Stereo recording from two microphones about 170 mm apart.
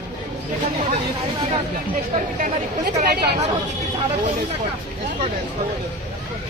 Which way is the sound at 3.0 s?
65° right (ahead or behind).